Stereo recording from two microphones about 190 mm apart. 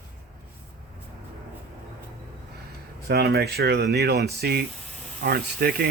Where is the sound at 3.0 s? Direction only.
55° right (ahead or behind).